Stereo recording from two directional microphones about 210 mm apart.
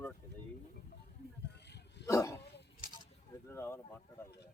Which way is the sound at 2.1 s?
15° left (ahead or behind).